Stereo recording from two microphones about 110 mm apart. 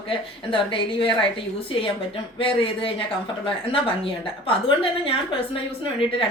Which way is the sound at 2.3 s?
55° left (ahead or behind).